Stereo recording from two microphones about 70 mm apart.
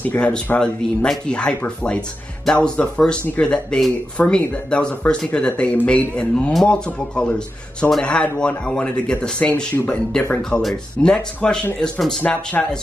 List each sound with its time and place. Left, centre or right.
0.0 s speech: left
0.6 s speech: centre
10.2 s speech: left
10.6 s speech: centre
12.2 s speech: left